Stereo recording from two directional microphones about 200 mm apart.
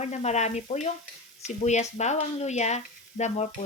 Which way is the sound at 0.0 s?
35° left (ahead or behind).